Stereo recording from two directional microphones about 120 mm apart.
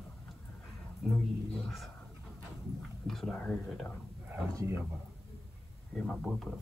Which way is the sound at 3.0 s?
5° left (ahead or behind).